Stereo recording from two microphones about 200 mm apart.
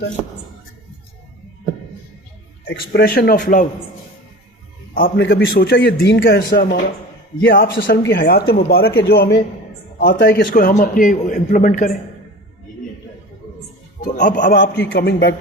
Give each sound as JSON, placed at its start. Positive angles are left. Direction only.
{"t": 2.7, "sound": "a man's voice", "side_deg": 50}
{"t": 4.9, "sound": "a man's voice", "side_deg": 50}
{"t": 14.0, "sound": "a man's voice", "side_deg": 40}
{"t": 14.6, "sound": "a man's voice", "side_deg": 55}